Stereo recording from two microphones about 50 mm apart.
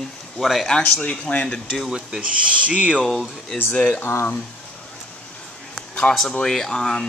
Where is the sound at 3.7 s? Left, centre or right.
Left.